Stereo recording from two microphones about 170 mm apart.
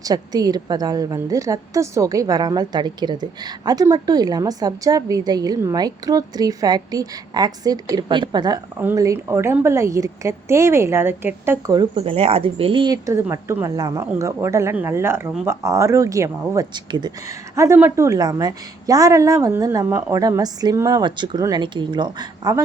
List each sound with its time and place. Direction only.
0.0 s speech: 20° right (ahead or behind)
8.8 s a woman's voice: 15° right (ahead or behind)
11.9 s speech: 35° right (ahead or behind)